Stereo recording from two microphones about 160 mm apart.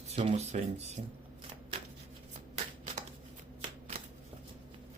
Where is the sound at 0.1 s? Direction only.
40° right (ahead or behind).